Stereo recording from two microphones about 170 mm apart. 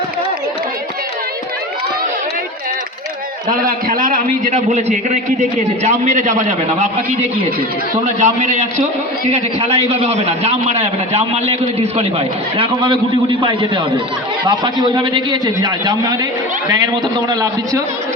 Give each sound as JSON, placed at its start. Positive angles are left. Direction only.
{"t": 3.7, "sound": "a man's voice", "side_deg": -55}